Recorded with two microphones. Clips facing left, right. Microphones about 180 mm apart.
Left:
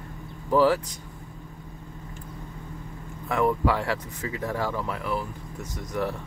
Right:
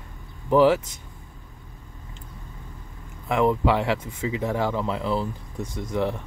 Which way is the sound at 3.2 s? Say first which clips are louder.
Right 3 dB; 20° right (ahead or behind).